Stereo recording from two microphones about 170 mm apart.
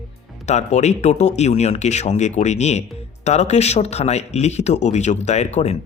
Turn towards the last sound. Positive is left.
turn(degrees=40)  # may be behind; listen again after turning